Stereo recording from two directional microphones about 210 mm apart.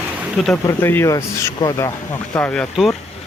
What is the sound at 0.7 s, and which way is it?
Speech, 10° left (ahead or behind).